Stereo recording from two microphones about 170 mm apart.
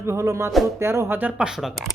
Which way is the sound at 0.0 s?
15° right (ahead or behind).